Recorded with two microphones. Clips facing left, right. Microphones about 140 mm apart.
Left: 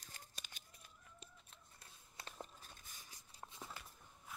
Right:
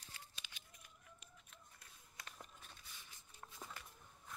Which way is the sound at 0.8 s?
30° left (ahead or behind).